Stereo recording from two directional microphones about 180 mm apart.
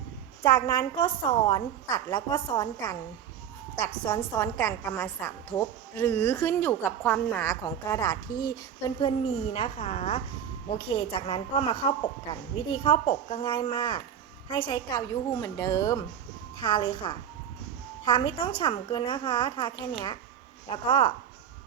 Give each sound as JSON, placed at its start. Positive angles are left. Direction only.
{"t": 0.4, "sound": "a woman's voice", "side_deg": 20}
{"t": 4.0, "sound": "a woman's voice", "side_deg": 20}